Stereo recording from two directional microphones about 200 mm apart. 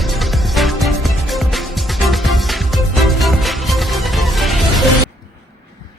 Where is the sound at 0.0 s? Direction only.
Centre (ahead or behind).